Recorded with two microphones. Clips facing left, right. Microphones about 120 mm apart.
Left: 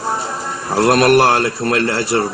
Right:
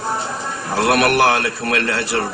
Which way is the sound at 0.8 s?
35° left (ahead or behind).